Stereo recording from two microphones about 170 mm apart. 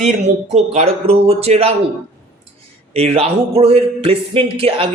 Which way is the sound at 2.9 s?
35° right (ahead or behind).